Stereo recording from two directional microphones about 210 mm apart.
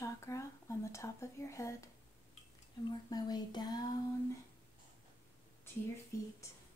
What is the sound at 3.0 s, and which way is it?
Speech, 20° left (ahead or behind).